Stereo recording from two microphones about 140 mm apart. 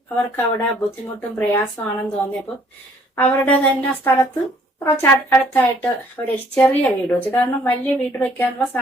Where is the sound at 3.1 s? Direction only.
10° left (ahead or behind).